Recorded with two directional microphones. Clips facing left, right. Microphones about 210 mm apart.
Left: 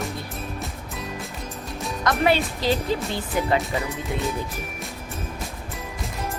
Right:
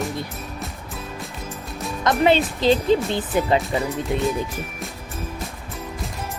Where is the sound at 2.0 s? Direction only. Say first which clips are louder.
Right 3 dB; 20° right (ahead or behind).